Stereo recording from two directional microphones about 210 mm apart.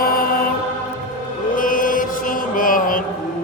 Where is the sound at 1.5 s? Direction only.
40° left (ahead or behind).